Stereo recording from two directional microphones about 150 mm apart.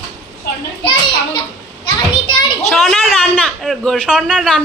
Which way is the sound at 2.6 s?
Centre (ahead or behind).